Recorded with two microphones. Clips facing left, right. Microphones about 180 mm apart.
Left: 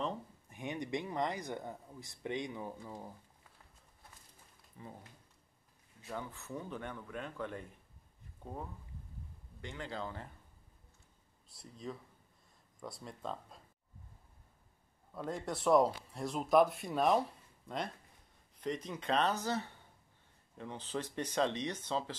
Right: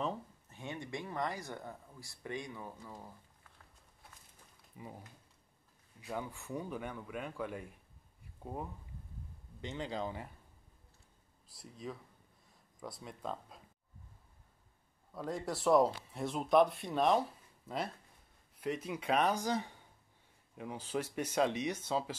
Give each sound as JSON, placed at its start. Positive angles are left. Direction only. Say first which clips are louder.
{"t": 0.5, "sound": "speech", "louder": "left 4 dB", "side_deg": 15}
{"t": 4.7, "sound": "speech", "louder": "right 1 dB", "side_deg": -10}
{"t": 5.9, "sound": "speech", "louder": "right 2 dB", "side_deg": -10}
{"t": 9.6, "sound": "speech", "louder": "right 3 dB", "side_deg": -20}
{"t": 11.5, "sound": "speech", "louder": "even", "side_deg": 0}
{"t": 15.1, "sound": "speech", "louder": "right 1 dB", "side_deg": 0}